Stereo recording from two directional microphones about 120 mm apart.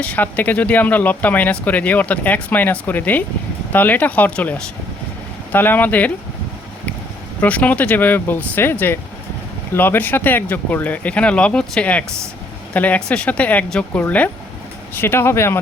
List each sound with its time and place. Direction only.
0.0 s speech: 15° left (ahead or behind)
7.4 s speech: 10° left (ahead or behind)